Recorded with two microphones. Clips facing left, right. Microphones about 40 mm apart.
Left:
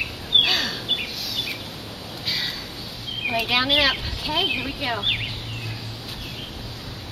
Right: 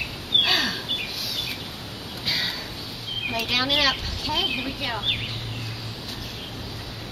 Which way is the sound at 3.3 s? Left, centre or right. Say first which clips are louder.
Left 3 dB; centre.